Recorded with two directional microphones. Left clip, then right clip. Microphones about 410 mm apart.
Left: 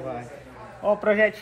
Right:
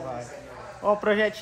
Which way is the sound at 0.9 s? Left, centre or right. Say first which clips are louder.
Left 2 dB; centre.